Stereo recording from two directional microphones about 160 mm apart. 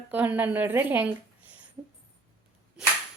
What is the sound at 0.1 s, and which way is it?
A woman's voice, 10° right (ahead or behind).